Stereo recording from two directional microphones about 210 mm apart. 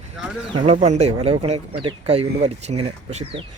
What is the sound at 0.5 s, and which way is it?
Speech, 30° right (ahead or behind).